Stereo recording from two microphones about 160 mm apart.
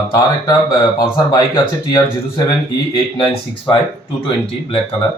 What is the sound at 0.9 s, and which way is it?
Speech, 25° left (ahead or behind).